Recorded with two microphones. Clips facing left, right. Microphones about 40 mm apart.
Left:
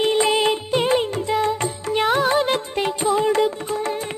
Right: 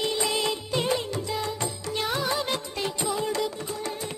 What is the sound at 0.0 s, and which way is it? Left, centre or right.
Music, left.